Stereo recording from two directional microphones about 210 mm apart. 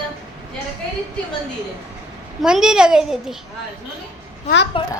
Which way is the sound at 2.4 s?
Centre (ahead or behind).